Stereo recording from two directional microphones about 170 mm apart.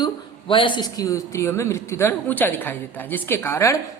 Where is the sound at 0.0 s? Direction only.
30° left (ahead or behind).